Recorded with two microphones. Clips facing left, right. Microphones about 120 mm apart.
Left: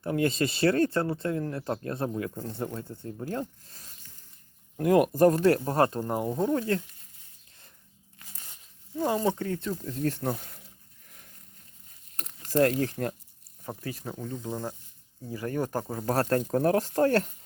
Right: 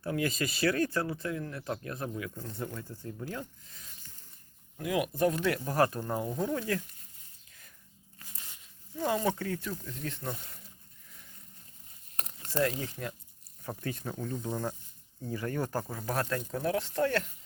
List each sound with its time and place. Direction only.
0.0 s speech: 30° left (ahead or behind)
4.8 s speech: 45° left (ahead or behind); by 6.8 s 30° left (ahead or behind)
9.0 s speech: 30° left (ahead or behind)
12.5 s speech: 60° left (ahead or behind)
13.9 s speech: 10° left (ahead or behind)
16.3 s speech: 50° left (ahead or behind)